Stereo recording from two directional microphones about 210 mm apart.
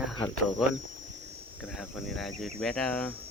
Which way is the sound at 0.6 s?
Centre (ahead or behind).